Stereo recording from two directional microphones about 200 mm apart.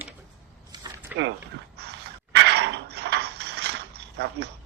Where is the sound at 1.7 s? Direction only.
55° right (ahead or behind).